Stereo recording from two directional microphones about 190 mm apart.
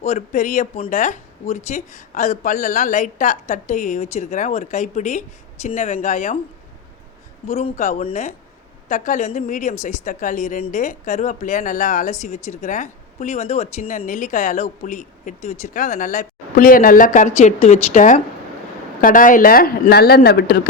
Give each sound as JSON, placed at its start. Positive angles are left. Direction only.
{"t": 0.0, "sound": "speech", "side_deg": 35}
{"t": 7.4, "sound": "speech", "side_deg": 35}